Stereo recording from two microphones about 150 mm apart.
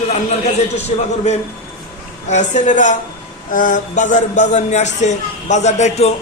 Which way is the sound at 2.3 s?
55° left (ahead or behind).